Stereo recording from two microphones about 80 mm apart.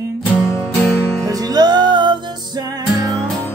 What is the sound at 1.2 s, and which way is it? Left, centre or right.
Music, right.